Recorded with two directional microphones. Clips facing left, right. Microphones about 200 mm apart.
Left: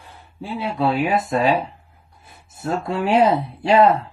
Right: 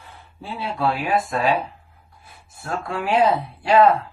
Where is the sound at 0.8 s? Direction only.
20° left (ahead or behind).